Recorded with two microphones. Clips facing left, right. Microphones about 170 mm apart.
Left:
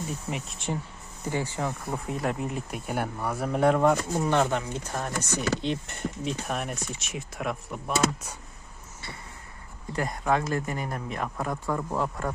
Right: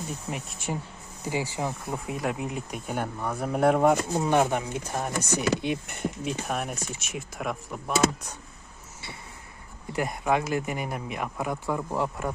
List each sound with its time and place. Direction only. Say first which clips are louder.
0.1 s speech: left 1 dB; centre (ahead or behind)
3.5 s speech: right 1 dB; 5° right (ahead or behind)
9.9 s speech: right 1 dB; 15° right (ahead or behind)